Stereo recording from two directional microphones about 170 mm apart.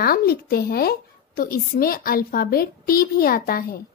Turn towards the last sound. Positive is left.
turn(degrees=60)  # may be behind; listen again after turning